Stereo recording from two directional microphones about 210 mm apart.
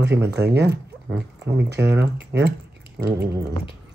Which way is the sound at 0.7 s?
10° right (ahead or behind).